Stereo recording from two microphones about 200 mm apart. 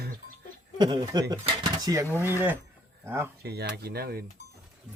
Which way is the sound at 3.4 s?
55° right (ahead or behind).